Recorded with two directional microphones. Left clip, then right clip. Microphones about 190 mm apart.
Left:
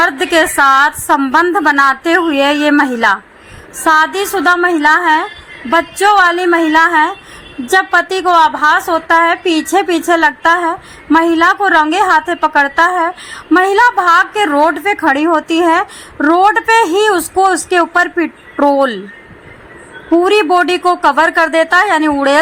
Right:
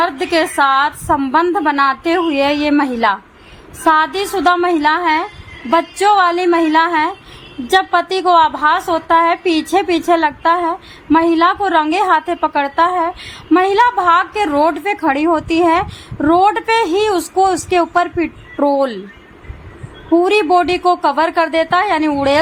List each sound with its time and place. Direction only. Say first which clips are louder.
0.0 s a woman's voice: left 4 dB; 15° left (ahead or behind)
20.1 s a woman's voice: left 2 dB; 10° left (ahead or behind)